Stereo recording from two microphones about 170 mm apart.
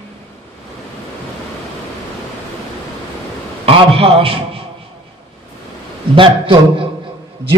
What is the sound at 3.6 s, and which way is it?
Speech, 35° right (ahead or behind).